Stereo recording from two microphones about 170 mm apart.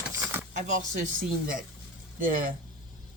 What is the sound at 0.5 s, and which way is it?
Speech, 45° right (ahead or behind).